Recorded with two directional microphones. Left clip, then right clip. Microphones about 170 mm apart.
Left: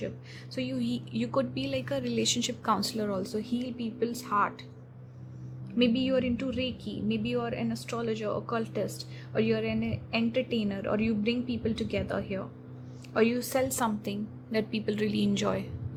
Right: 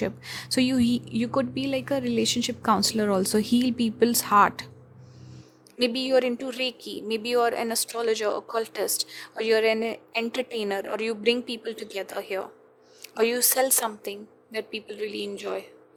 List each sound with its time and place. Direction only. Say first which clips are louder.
0.0 s speech: right 8 dB; 45° right (ahead or behind)
5.8 s a woman's voice: right 5 dB; 45° right (ahead or behind); by 15.6 s 25° right (ahead or behind)